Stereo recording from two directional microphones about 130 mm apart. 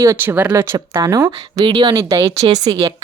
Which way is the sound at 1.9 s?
25° right (ahead or behind).